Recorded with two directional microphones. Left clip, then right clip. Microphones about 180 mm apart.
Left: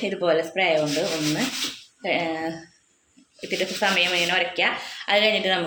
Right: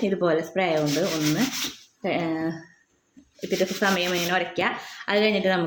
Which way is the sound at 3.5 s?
50° right (ahead or behind).